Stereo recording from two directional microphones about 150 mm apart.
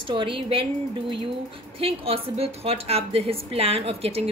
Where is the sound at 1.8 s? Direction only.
40° right (ahead or behind).